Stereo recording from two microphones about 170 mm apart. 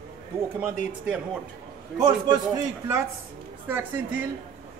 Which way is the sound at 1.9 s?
25° right (ahead or behind).